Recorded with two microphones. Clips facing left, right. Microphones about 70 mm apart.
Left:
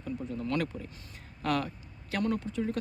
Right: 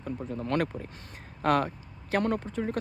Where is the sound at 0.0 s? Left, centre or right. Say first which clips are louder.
Right 1 dB; right.